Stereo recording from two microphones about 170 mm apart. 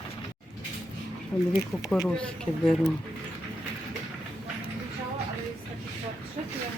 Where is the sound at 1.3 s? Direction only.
10° left (ahead or behind).